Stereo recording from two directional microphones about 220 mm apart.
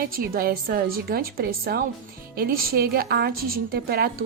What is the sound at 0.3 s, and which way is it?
A woman's voice, 40° right (ahead or behind).